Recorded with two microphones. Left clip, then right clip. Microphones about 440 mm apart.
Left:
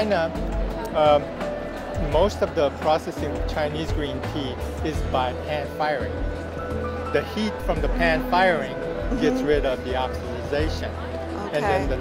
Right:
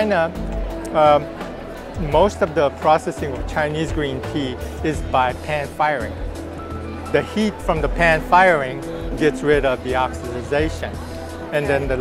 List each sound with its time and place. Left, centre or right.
0.0 s music: right
0.9 s speech: right
4.8 s speech: right
7.1 s speech: right